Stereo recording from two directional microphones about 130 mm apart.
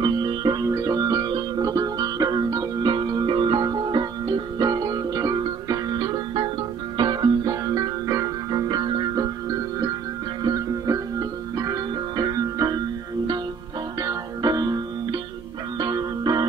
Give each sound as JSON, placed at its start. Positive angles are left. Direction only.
{"t": 0.0, "sound": "music", "side_deg": -35}
{"t": 14.0, "sound": "music", "side_deg": -30}